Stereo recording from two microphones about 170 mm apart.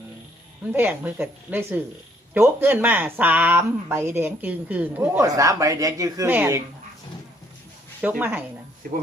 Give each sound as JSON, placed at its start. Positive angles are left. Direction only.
{"t": 0.7, "sound": "speech", "side_deg": -10}
{"t": 8.2, "sound": "speech", "side_deg": -10}
{"t": 8.8, "sound": "speech", "side_deg": -55}